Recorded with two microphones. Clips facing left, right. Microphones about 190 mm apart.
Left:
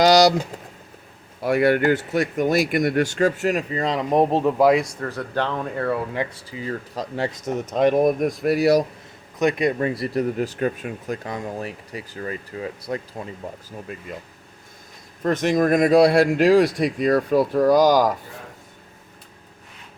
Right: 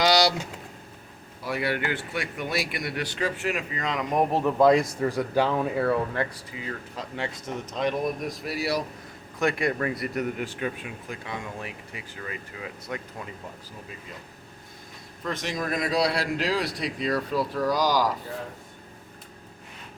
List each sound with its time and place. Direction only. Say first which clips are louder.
0.0 s speech: left 7 dB; 45° left (ahead or behind)
1.4 s speech: left 10 dB; 55° left (ahead or behind); by 4.9 s 5° left (ahead or behind)
4.9 s speech: right 2 dB; 10° right (ahead or behind)
6.3 s speech: left 6 dB; 30° left (ahead or behind); by 8.8 s 50° left (ahead or behind)
9.4 s speech: left 5 dB; 20° left (ahead or behind)
15.2 s speech: left 11 dB; 50° left (ahead or behind)